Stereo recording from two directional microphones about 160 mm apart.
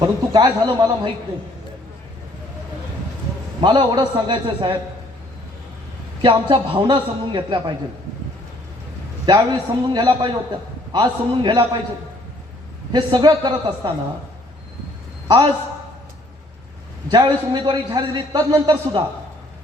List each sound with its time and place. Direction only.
0.0 s a man's voice: 25° right (ahead or behind)
3.6 s a man's voice: 30° right (ahead or behind)
6.2 s a man's voice: 30° right (ahead or behind)
9.2 s a man's voice: 25° right (ahead or behind)
12.9 s a man's voice: 30° right (ahead or behind)
15.3 s a man's voice: 30° right (ahead or behind)
17.1 s a man's voice: 25° right (ahead or behind)